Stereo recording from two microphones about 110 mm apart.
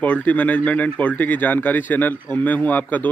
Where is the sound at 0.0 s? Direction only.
15° left (ahead or behind).